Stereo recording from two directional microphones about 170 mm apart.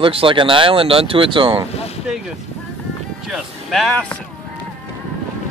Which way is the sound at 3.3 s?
Centre (ahead or behind).